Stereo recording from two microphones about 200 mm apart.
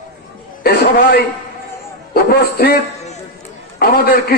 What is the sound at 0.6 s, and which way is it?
Speech, 50° left (ahead or behind).